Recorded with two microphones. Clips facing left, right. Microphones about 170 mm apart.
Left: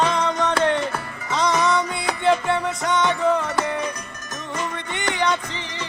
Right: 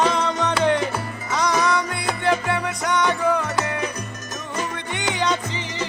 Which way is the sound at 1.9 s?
5° right (ahead or behind).